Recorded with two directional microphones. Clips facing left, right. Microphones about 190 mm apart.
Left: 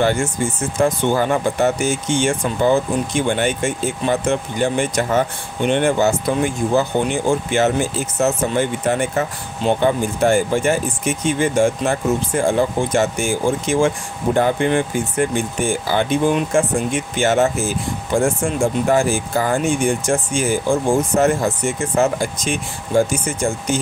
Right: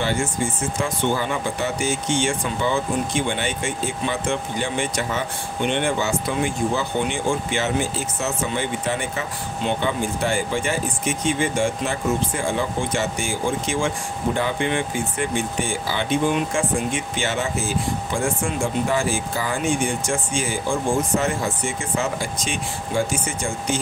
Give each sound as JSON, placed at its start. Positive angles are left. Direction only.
{"t": 0.8, "sound": "speech", "side_deg": 45}